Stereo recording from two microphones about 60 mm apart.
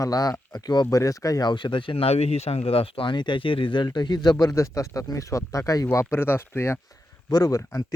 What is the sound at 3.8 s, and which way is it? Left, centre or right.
Speech, left.